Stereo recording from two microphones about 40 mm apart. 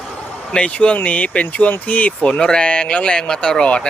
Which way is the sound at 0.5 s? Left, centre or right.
Left.